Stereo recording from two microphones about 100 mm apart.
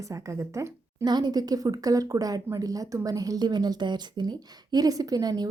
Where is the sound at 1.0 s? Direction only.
45° right (ahead or behind).